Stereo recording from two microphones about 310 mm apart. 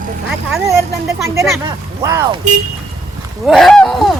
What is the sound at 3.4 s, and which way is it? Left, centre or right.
Speech, centre.